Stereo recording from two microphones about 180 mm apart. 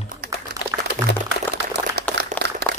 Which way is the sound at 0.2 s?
55° right (ahead or behind).